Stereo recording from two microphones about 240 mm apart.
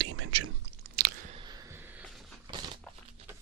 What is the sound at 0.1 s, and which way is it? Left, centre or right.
Chewing, right.